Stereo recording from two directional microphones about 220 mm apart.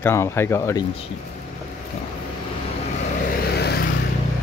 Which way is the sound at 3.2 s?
45° left (ahead or behind).